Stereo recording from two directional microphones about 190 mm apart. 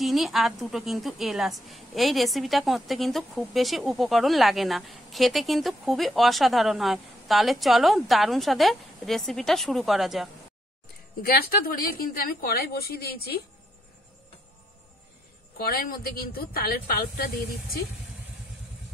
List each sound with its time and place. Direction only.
0.0 s a woman's voice: centre (ahead or behind)
11.2 s a woman's voice: 50° left (ahead or behind)
15.5 s a woman's voice: 50° left (ahead or behind)